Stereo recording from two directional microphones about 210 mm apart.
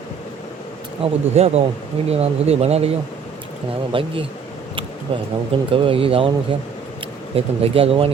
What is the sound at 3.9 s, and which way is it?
Speech, 25° right (ahead or behind).